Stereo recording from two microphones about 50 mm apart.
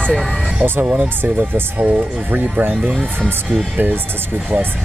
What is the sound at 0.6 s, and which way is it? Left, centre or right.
Speech, right.